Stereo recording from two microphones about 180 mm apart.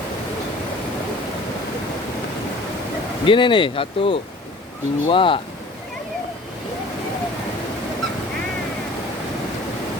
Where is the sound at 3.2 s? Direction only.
25° left (ahead or behind).